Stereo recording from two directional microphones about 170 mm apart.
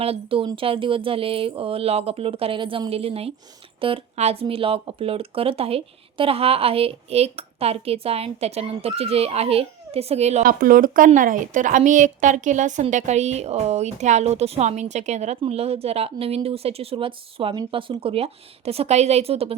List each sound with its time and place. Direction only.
0.0 s speech: 35° right (ahead or behind)
10.4 s speech: 55° right (ahead or behind); by 19.5 s 35° right (ahead or behind)